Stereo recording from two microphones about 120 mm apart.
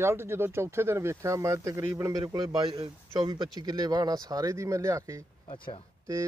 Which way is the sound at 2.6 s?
50° right (ahead or behind).